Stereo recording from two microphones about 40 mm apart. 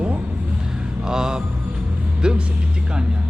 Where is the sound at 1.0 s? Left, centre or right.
Centre.